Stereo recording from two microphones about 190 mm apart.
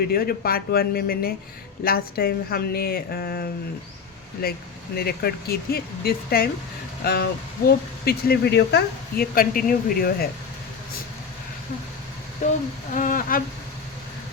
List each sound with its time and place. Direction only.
0.0 s speech: 55° left (ahead or behind)
12.4 s a sound: 40° left (ahead or behind)
12.9 s speech: 45° left (ahead or behind)